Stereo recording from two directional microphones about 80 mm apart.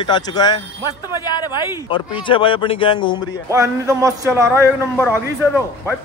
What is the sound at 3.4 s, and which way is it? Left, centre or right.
Speech, right.